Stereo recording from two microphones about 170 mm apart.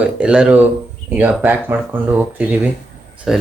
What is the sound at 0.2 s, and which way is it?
Speech, 5° right (ahead or behind).